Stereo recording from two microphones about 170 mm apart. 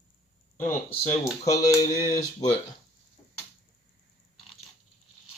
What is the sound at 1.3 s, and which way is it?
Speech, 20° left (ahead or behind).